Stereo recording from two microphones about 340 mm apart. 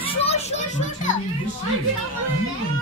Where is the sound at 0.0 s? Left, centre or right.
Centre.